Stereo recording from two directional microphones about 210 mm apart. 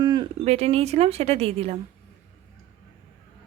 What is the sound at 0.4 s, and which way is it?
A woman's voice, 30° right (ahead or behind).